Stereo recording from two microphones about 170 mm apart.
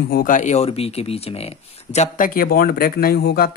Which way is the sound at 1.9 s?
50° left (ahead or behind).